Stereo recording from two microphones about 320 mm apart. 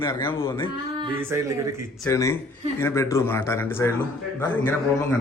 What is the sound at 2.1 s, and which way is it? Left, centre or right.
A man's voice, centre.